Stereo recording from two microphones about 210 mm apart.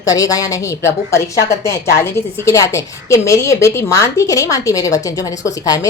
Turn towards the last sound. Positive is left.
turn(degrees=15)  # may be behind; listen again after turning